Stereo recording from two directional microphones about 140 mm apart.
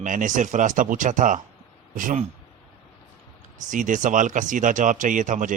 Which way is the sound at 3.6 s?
70° right (ahead or behind).